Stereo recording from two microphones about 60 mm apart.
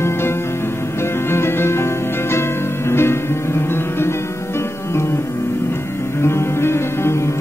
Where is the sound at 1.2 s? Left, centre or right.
Left.